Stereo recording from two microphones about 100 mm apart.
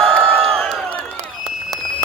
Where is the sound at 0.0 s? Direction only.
10° left (ahead or behind).